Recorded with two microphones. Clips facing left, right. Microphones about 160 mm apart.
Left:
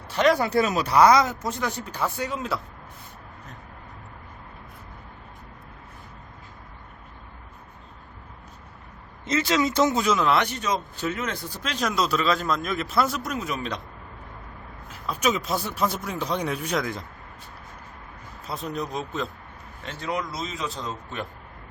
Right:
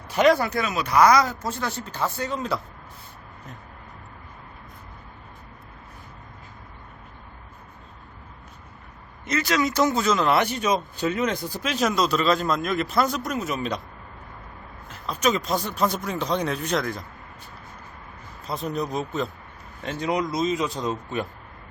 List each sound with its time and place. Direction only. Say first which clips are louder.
0.1 s speech: right 2 dB; 5° right (ahead or behind)
0.5 s speech: left 2 dB; 40° left (ahead or behind); by 2.6 s 5° left (ahead or behind)
9.2 s speech: left 1 dB; 25° left (ahead or behind)
10.1 s speech: right 1 dB; centre (ahead or behind)
15.1 s speech: right 2 dB; 5° left (ahead or behind)
18.4 s speech: right 3 dB; centre (ahead or behind)
19.8 s speech: right 5 dB; 15° right (ahead or behind)